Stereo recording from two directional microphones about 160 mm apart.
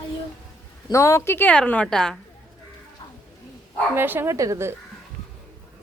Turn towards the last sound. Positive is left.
turn(degrees=-20)  # may be behind; listen again after turning